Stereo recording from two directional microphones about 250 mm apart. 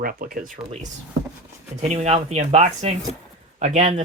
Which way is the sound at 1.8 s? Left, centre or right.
Right.